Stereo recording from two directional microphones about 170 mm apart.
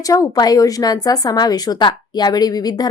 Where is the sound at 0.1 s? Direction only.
20° left (ahead or behind).